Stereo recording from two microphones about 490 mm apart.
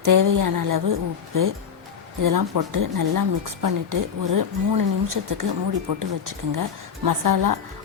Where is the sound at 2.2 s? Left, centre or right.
Right.